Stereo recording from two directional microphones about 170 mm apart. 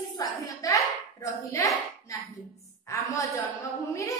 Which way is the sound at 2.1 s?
15° left (ahead or behind).